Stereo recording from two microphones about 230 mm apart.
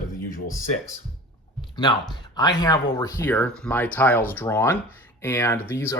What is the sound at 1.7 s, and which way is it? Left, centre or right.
Speech, centre.